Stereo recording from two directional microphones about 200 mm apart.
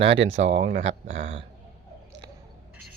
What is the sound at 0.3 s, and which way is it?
Speech, 35° right (ahead or behind).